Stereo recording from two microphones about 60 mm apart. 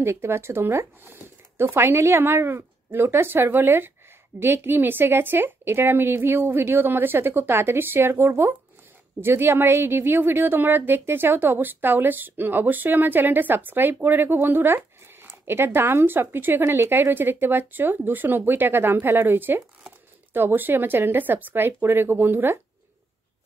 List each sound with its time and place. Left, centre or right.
0.0 s a woman's voice: right